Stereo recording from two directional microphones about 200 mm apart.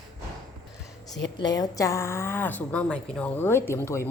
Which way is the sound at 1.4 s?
20° left (ahead or behind).